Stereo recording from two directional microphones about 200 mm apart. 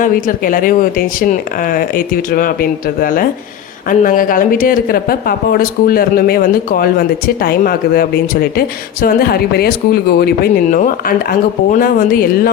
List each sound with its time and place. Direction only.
0.0 s speech: 45° left (ahead or behind)